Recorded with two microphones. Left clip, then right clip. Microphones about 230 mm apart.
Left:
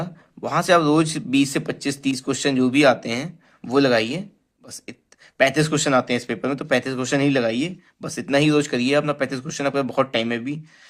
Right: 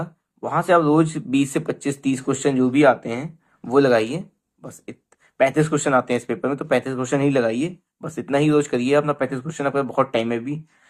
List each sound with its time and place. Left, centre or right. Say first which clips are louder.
0.0 s speech: even; left
3.7 s speech: right 2 dB; left
5.4 s speech: even; left
8.0 s speech: left 1 dB; left